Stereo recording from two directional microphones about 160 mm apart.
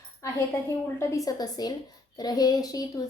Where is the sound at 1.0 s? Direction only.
20° left (ahead or behind).